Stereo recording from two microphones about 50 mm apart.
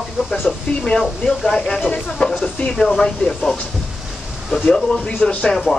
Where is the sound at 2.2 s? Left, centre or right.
Left.